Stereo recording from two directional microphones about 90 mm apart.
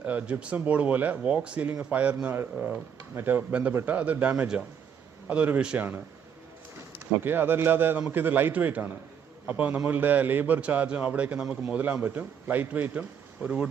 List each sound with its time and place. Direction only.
0.0 s a man's voice: 15° right (ahead or behind)
3.2 s a man's voice: 20° right (ahead or behind)
7.2 s a man's voice: 25° right (ahead or behind)